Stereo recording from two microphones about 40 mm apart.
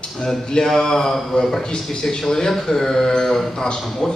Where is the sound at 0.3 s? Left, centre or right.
Centre.